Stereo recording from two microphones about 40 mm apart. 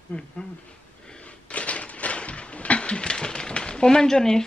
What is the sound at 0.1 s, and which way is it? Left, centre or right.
Speech, left.